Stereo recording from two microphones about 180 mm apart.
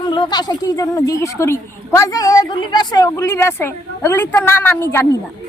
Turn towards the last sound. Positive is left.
turn(degrees=10)  # may be behind; listen again after turning